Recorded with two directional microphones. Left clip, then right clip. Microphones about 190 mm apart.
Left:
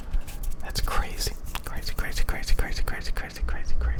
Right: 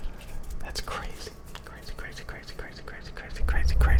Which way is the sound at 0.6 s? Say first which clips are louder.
Left 4 dB; 5° left (ahead or behind).